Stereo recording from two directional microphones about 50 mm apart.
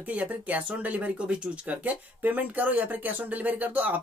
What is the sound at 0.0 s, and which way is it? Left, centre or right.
Speech, right.